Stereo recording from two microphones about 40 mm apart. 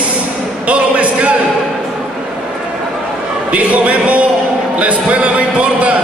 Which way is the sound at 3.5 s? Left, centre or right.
Right.